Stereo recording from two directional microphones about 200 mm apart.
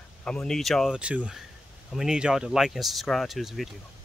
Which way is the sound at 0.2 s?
5° left (ahead or behind).